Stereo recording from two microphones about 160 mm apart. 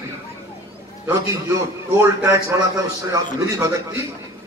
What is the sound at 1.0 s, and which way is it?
A man's voice, 15° right (ahead or behind).